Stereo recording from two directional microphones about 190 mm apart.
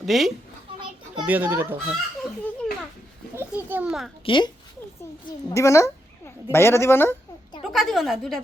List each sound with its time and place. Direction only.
0.0 s a child's voice: centre (ahead or behind)
3.3 s a child's voice: 10° right (ahead or behind)
4.3 s a woman's voice: 25° left (ahead or behind)
7.6 s a woman's voice: centre (ahead or behind)